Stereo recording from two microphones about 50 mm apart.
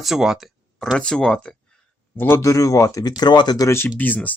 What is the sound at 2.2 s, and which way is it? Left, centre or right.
Speech, left.